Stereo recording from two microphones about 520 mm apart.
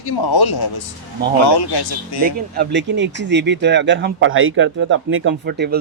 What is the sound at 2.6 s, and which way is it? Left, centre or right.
Speech, centre.